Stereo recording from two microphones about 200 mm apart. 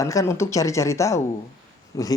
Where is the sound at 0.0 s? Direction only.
15° left (ahead or behind).